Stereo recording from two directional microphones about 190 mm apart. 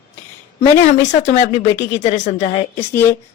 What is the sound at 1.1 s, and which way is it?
A woman's voice, 40° left (ahead or behind).